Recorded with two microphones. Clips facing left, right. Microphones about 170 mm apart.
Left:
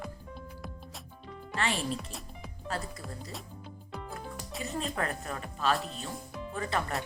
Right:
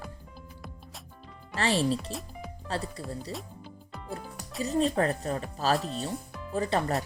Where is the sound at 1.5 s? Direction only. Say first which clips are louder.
Right 6 dB; 35° right (ahead or behind).